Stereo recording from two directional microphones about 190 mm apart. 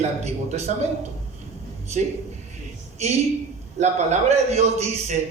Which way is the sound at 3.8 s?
35° right (ahead or behind).